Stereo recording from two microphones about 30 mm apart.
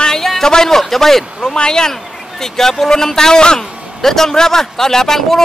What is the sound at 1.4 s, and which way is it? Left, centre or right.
A man's voice, left.